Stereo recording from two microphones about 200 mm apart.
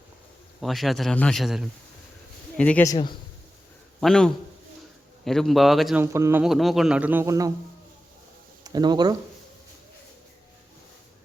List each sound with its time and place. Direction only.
0.6 s a man's voice: centre (ahead or behind)
2.9 s speech: 25° left (ahead or behind)
4.0 s a man's voice: 5° left (ahead or behind)
6.0 s a man's voice: 10° right (ahead or behind)
6.4 s a man's voice: centre (ahead or behind)
8.6 s speech: 20° right (ahead or behind)